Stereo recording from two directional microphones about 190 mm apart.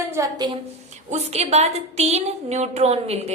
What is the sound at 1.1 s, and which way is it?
A woman's voice, 35° right (ahead or behind).